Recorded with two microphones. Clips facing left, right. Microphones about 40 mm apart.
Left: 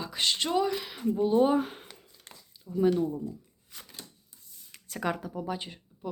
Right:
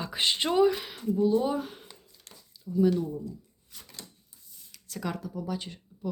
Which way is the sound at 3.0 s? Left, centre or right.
Left.